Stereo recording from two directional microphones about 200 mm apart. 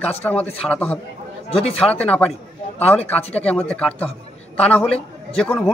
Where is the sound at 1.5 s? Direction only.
30° left (ahead or behind).